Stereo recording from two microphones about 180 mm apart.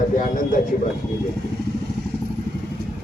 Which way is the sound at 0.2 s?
50° left (ahead or behind).